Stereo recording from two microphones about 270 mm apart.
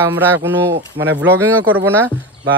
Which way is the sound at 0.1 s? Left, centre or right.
Centre.